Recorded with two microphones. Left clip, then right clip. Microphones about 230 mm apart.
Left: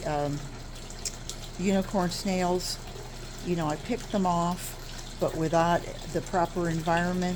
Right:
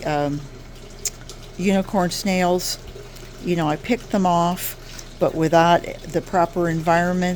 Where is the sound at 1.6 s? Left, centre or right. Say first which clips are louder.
Right 7 dB; right.